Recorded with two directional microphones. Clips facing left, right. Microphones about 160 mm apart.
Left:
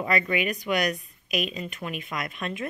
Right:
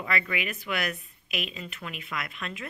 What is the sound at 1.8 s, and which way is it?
Speech, 35° left (ahead or behind).